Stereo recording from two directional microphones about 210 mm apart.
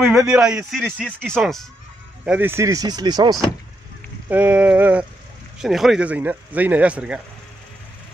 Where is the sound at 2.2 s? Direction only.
10° right (ahead or behind).